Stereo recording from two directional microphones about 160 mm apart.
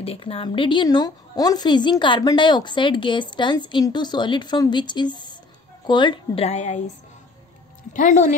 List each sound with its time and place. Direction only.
0.0 s a woman's voice: 35° left (ahead or behind)
7.9 s speech: 50° left (ahead or behind)